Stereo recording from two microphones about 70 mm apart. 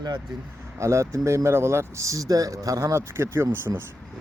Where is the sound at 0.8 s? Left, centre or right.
Right.